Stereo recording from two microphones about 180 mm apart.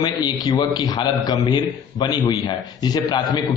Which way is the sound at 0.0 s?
25° left (ahead or behind).